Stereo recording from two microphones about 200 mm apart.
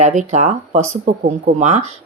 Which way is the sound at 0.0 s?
35° right (ahead or behind).